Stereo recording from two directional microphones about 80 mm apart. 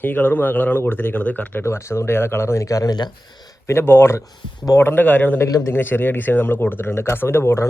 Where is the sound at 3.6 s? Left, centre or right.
Left.